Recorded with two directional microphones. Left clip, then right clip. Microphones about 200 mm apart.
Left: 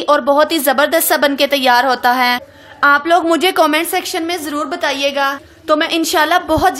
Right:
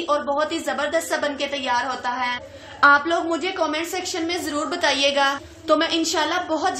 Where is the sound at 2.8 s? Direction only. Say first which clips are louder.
Left 5 dB; 30° left (ahead or behind).